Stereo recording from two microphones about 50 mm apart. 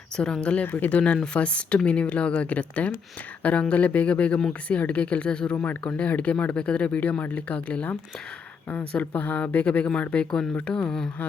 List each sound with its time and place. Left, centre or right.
0.4 s speech: left
8.9 s speech: left; by 11.1 s centre